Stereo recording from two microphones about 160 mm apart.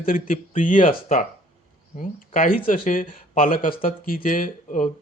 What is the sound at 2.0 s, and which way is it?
Speech, 60° left (ahead or behind).